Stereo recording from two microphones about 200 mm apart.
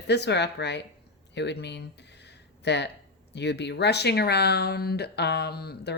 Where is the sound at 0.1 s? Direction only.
60° left (ahead or behind).